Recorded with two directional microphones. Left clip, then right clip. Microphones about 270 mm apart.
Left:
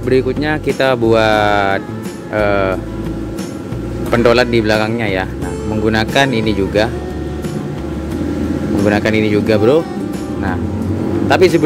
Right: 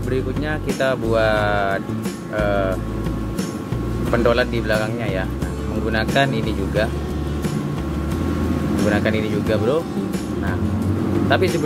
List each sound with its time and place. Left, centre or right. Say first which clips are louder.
0.1 s speech: left 10 dB; left
4.1 s speech: left 7 dB; left
8.8 s speech: left 7 dB; left
11.2 s speech: left 8 dB; left